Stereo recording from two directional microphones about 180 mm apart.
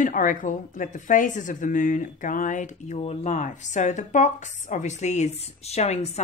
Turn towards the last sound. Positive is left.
turn(degrees=35)  # may be behind; listen again after turning